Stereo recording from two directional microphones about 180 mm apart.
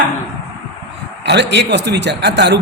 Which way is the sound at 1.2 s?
70° right (ahead or behind).